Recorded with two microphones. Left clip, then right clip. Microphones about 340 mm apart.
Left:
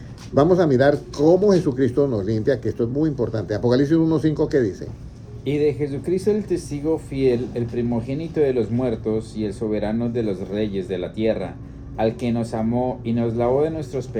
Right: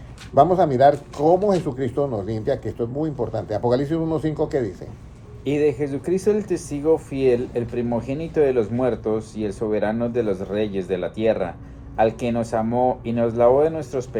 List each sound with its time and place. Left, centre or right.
0.3 s speech: centre
5.5 s speech: right